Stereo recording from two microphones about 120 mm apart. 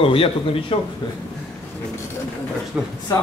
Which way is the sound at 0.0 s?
50° left (ahead or behind).